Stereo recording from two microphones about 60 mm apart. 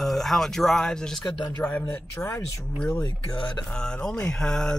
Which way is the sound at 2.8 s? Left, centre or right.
Centre.